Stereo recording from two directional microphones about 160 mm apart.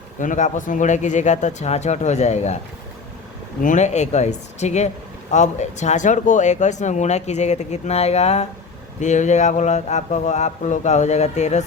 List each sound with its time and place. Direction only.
0.2 s speech: 50° left (ahead or behind)
3.6 s speech: 50° left (ahead or behind)